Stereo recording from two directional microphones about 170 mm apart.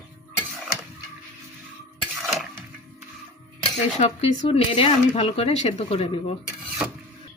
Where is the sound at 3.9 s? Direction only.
40° left (ahead or behind).